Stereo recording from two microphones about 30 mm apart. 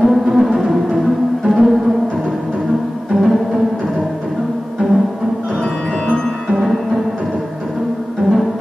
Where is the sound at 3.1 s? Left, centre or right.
Centre.